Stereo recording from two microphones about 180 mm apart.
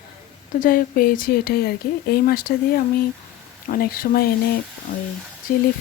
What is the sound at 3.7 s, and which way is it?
Speech, 55° left (ahead or behind).